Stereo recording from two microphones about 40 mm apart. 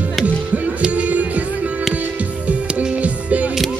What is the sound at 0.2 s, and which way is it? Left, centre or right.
Music, right.